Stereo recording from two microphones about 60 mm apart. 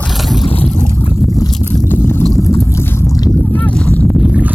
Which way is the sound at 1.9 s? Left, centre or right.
Left.